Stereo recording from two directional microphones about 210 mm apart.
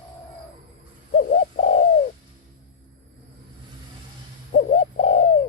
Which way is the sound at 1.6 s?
45° left (ahead or behind).